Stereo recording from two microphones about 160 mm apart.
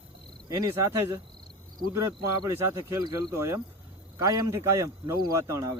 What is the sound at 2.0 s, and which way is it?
A man's voice, 15° right (ahead or behind).